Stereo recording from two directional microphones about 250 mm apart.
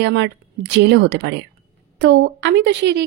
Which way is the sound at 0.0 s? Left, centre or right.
Right.